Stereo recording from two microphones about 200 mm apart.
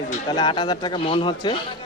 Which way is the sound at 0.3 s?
20° left (ahead or behind).